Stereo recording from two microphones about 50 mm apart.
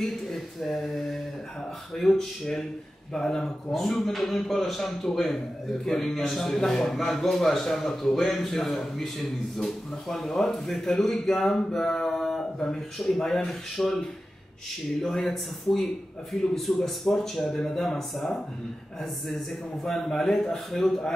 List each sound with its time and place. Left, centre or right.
0.0 s a man's voice: centre
15.0 s a man's voice: centre